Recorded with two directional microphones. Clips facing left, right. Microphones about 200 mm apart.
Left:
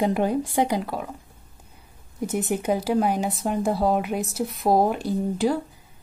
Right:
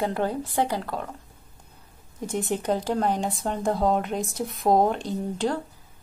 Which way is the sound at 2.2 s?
5° left (ahead or behind).